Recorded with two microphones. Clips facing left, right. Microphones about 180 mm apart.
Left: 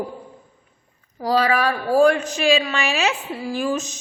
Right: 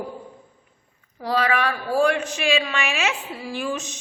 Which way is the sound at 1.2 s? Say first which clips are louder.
Left 3 dB; 35° left (ahead or behind).